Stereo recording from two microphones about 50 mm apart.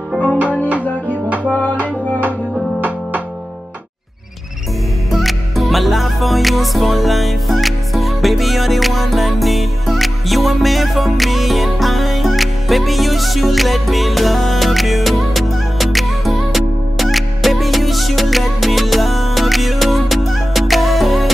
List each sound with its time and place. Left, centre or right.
1.8 s music: right
5.1 s music: centre